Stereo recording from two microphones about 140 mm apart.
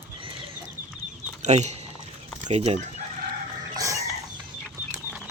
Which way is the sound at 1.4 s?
55° right (ahead or behind).